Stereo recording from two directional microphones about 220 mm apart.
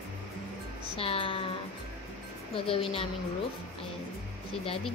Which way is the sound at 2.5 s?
25° left (ahead or behind).